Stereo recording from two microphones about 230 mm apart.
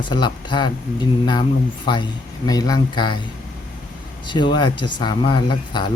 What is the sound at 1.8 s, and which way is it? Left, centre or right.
Speech, centre.